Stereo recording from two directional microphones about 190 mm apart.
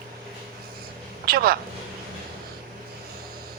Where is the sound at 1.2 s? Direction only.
50° right (ahead or behind).